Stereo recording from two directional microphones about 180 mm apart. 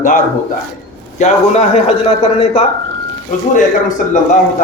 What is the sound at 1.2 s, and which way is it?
A man's voice, 35° left (ahead or behind).